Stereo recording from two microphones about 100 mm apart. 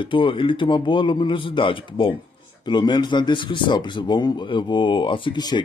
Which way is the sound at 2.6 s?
50° left (ahead or behind).